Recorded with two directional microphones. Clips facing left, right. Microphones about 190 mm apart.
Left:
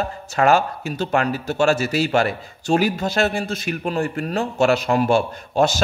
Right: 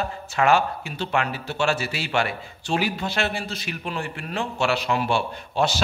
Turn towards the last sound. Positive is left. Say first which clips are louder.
# left 5 dB
turn(degrees=45)  # may be behind; listen again after turning